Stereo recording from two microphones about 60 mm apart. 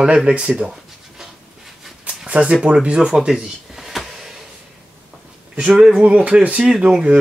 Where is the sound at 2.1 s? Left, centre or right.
Centre.